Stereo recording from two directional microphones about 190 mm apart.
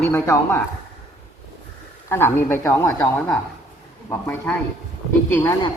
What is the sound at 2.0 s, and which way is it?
Speech, 10° left (ahead or behind).